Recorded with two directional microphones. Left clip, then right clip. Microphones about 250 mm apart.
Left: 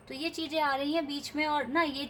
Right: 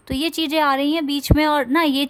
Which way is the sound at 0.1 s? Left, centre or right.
Right.